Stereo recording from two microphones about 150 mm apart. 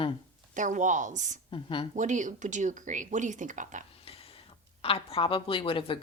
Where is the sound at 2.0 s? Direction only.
55° right (ahead or behind).